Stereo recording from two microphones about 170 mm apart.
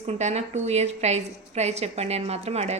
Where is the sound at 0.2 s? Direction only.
40° right (ahead or behind).